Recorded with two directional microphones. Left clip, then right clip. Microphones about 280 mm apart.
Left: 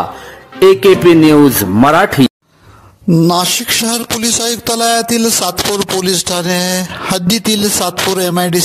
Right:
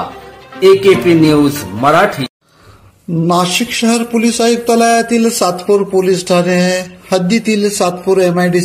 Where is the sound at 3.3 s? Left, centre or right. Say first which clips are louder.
Even; left.